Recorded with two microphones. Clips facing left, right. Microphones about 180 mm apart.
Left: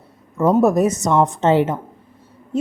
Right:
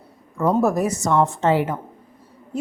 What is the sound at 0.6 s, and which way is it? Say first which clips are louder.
Speech: left 4 dB; 20° left (ahead or behind).